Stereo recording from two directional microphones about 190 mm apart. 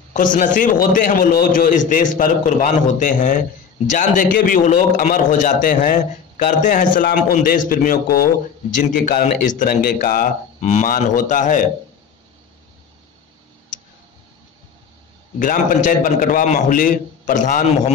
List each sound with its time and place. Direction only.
0.1 s a man's voice: 45° left (ahead or behind)
15.3 s a man's voice: 45° left (ahead or behind)